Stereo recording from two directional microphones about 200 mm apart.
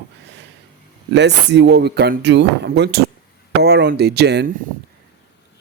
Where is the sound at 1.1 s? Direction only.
60° right (ahead or behind).